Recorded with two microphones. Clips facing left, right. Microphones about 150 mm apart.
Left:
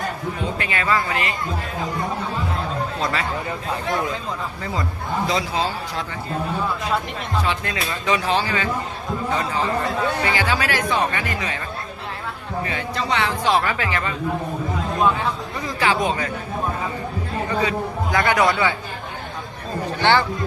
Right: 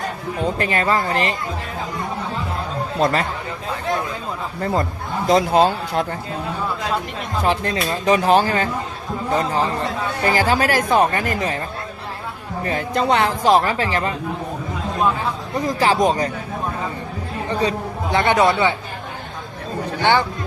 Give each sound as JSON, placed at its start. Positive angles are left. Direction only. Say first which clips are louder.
{"t": 0.6, "sound": "speech", "louder": "right 2 dB", "side_deg": -40}
{"t": 3.0, "sound": "a man's voice", "louder": "right 8 dB", "side_deg": -45}
{"t": 4.6, "sound": "a man's voice", "louder": "right 9 dB", "side_deg": -50}
{"t": 7.4, "sound": "a man's voice", "louder": "right 5 dB", "side_deg": -35}
{"t": 9.5, "sound": "a man's voice", "louder": "right 1 dB", "side_deg": -35}
{"t": 12.6, "sound": "a man's voice", "louder": "right 8 dB", "side_deg": -45}
{"t": 15.6, "sound": "speech", "louder": "right 4 dB", "side_deg": -40}
{"t": 17.5, "sound": "a man's voice", "louder": "right 2 dB", "side_deg": -35}
{"t": 20.0, "sound": "speech", "louder": "right 1 dB", "side_deg": -15}